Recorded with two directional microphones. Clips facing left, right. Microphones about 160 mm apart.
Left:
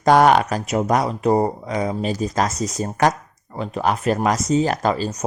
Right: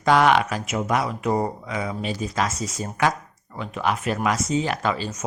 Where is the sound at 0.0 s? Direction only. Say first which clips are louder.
Left 4 dB; 40° left (ahead or behind).